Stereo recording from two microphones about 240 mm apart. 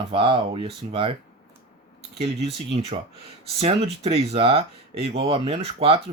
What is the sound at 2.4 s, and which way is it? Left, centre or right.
Speech, right.